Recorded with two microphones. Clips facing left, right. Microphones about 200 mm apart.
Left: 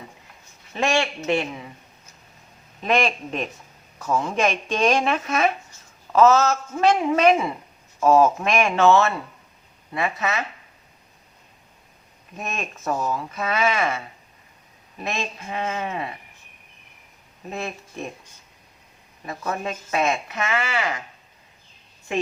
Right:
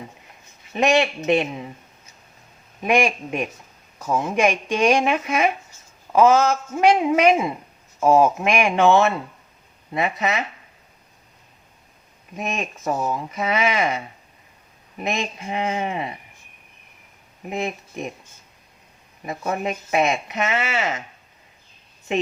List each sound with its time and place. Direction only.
0.7 s speech: 20° right (ahead or behind)
2.8 s speech: 10° right (ahead or behind)
12.4 s speech: 15° right (ahead or behind)
17.4 s speech: 15° right (ahead or behind)
19.2 s speech: 20° right (ahead or behind)
22.1 s speech: 20° right (ahead or behind)